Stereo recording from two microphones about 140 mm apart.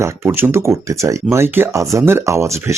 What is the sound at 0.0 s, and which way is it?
Speech, 15° right (ahead or behind).